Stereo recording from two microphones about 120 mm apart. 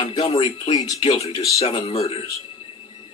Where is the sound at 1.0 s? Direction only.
55° left (ahead or behind).